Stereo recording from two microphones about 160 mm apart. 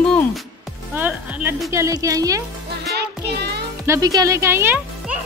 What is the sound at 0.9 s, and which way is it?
Speech, 10° right (ahead or behind).